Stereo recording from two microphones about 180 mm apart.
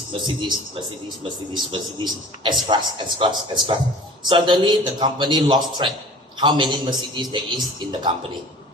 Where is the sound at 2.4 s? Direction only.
25° right (ahead or behind).